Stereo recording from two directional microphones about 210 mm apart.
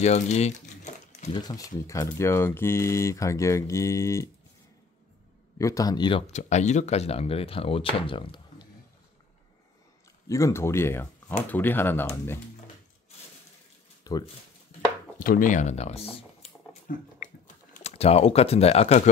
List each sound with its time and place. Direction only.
0.0 s crumpling: 30° left (ahead or behind)
1.3 s speech: 20° left (ahead or behind)
5.6 s speech: 15° left (ahead or behind)
10.2 s speech: 15° left (ahead or behind)
14.0 s speech: 20° left (ahead or behind)
15.1 s speech: 40° left (ahead or behind)
16.9 s speech: 40° left (ahead or behind)
17.7 s speech: 30° left (ahead or behind)